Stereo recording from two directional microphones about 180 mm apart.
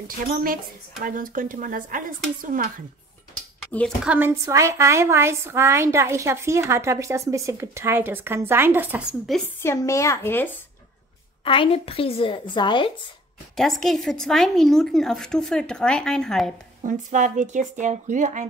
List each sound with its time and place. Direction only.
1.0 s speech: 50° right (ahead or behind)
3.7 s speech: 5° left (ahead or behind)
4.1 s a woman's voice: 10° right (ahead or behind)
9.6 s speech: 15° left (ahead or behind)
11.4 s speech: 30° left (ahead or behind)
13.6 s speech: centre (ahead or behind)
16.8 s speech: 45° right (ahead or behind)